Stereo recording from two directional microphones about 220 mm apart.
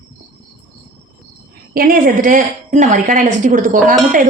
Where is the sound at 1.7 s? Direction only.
40° right (ahead or behind).